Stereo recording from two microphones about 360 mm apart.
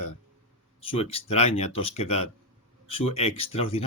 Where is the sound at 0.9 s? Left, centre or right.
Centre.